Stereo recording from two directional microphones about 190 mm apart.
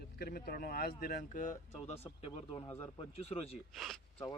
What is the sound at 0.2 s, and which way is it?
Speech, 55° left (ahead or behind).